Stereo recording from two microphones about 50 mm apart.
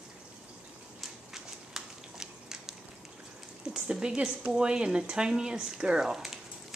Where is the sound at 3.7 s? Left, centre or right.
Centre.